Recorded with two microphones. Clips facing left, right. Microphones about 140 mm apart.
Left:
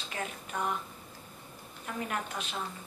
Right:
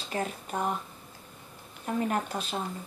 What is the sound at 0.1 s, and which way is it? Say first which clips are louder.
Speech: right 6 dB; 35° right (ahead or behind).